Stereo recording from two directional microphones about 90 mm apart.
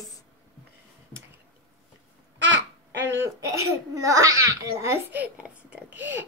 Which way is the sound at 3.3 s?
40° right (ahead or behind).